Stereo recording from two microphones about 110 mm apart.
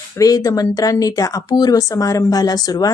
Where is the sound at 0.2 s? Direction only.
30° left (ahead or behind).